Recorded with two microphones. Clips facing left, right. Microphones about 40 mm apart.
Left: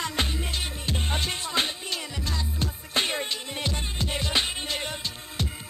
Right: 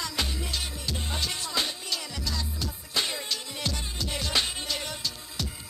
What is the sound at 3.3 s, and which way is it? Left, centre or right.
Music, left.